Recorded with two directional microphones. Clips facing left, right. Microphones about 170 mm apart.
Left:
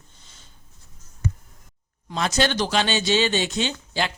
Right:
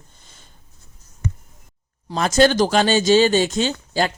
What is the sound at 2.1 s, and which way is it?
Speech, 45° right (ahead or behind).